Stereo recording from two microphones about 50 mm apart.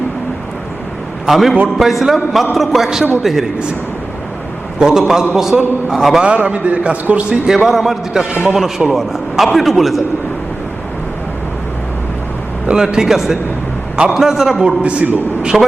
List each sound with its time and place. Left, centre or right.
1.3 s a man's voice: centre
4.8 s a man's voice: centre
6.2 s a man's voice: right
7.5 s a man's voice: centre
12.7 s a man's voice: centre
14.8 s a man's voice: right